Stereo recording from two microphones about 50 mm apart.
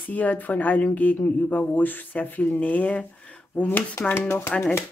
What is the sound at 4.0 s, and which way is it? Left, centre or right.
Speech, left.